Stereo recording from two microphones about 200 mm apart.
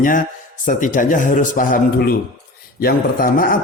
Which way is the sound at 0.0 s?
40° left (ahead or behind).